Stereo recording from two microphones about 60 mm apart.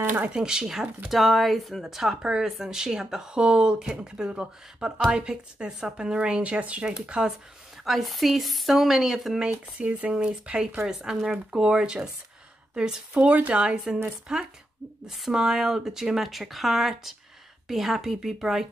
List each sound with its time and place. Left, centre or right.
0.3 s speech: centre
7.8 s speech: centre
10.9 s speech: centre